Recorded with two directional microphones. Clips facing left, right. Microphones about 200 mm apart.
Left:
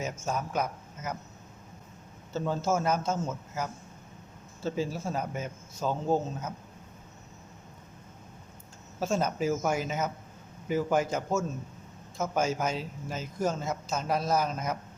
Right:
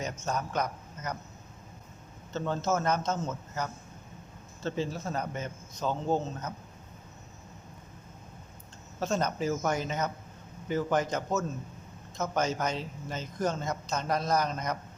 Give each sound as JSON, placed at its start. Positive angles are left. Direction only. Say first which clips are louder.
{"t": 0.0, "sound": "speech", "louder": "left 1 dB", "side_deg": 5}
{"t": 2.3, "sound": "speech", "louder": "left 1 dB", "side_deg": 10}
{"t": 9.0, "sound": "speech", "louder": "left 1 dB", "side_deg": 10}